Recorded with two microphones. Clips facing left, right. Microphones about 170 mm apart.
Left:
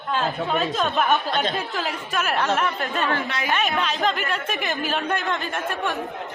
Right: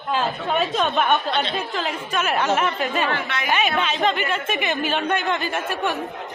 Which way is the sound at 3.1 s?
35° left (ahead or behind).